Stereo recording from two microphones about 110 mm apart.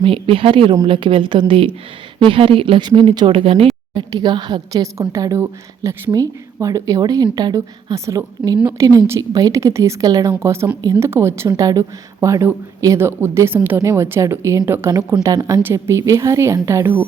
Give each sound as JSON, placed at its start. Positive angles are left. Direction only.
{"t": 0.0, "sound": "speech", "side_deg": -55}
{"t": 3.9, "sound": "a woman's voice", "side_deg": -40}
{"t": 7.9, "sound": "speech", "side_deg": -30}